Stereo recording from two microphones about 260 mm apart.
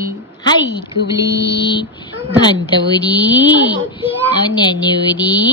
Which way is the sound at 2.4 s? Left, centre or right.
Centre.